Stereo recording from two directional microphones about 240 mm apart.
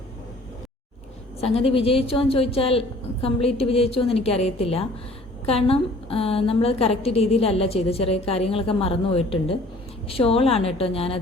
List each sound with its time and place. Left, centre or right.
1.5 s a woman's voice: left